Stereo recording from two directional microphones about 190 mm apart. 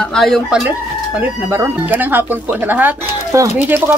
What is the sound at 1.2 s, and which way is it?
Speech, 10° right (ahead or behind).